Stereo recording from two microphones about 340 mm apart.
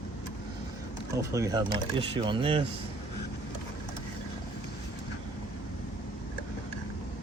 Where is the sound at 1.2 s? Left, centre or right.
Centre.